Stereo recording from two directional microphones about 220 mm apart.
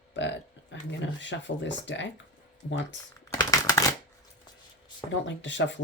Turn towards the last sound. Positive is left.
turn(degrees=55)  # may be behind; listen again after turning